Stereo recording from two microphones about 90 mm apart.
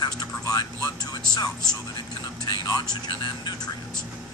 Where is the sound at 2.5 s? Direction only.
50° left (ahead or behind).